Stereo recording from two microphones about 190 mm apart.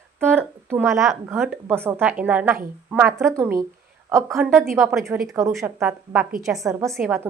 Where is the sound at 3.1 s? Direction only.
15° right (ahead or behind).